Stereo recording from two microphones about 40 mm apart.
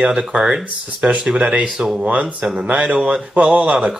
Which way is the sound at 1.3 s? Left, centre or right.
Right.